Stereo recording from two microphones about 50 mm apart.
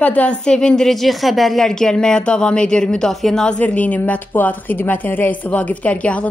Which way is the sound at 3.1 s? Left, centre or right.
Centre.